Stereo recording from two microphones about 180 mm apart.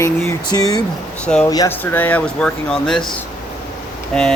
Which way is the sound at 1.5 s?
15° left (ahead or behind).